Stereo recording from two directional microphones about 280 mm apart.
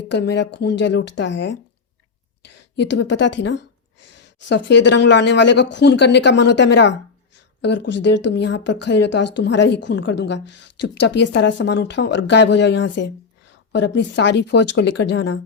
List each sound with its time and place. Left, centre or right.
0.1 s a woman's voice: left